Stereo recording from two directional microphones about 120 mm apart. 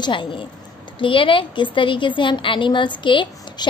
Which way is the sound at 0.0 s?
45° left (ahead or behind).